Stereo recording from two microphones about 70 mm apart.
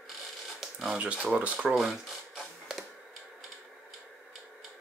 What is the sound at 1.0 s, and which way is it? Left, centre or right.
Speech, centre.